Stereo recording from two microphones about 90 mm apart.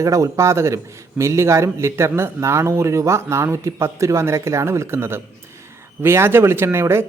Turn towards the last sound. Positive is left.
turn(degrees=-30)  # may be behind; listen again after turning